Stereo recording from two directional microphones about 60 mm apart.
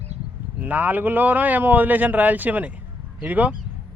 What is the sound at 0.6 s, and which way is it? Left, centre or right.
Speech, right.